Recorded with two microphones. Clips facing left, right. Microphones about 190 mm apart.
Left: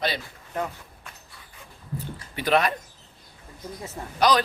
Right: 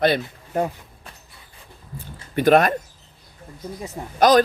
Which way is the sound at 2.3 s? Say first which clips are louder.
Right 7 dB; 50° right (ahead or behind).